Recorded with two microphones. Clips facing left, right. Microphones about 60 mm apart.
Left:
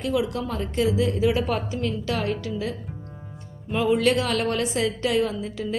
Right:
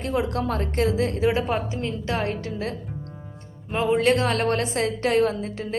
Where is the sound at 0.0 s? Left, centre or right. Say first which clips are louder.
Even; right.